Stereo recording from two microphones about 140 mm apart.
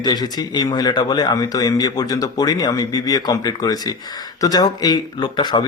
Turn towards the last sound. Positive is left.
turn(degrees=30)  # may be behind; listen again after turning